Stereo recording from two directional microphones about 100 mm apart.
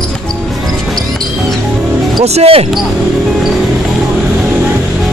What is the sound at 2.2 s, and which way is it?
Speech, 90° right.